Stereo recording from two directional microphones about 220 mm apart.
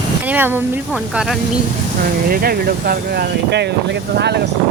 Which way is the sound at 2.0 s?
40° right (ahead or behind).